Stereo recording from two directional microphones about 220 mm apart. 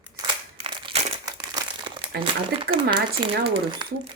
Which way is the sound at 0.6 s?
25° right (ahead or behind).